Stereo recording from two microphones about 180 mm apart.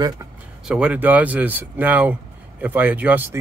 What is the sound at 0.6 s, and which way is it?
Speech, 5° right (ahead or behind).